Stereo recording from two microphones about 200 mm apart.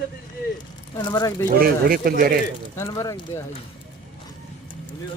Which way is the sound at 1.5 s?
50° right (ahead or behind).